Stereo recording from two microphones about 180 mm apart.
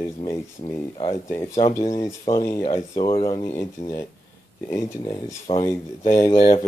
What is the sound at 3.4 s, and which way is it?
Speech, 15° left (ahead or behind).